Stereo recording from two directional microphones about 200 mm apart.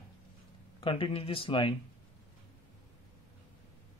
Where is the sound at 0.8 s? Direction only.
25° left (ahead or behind).